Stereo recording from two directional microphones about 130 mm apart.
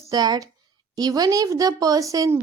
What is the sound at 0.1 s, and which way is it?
Speech, 30° right (ahead or behind).